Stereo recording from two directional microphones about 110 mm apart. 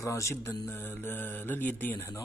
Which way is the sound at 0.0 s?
25° left (ahead or behind).